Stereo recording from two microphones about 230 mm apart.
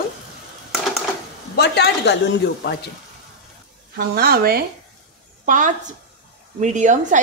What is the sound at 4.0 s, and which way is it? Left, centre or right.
A woman's voice, right.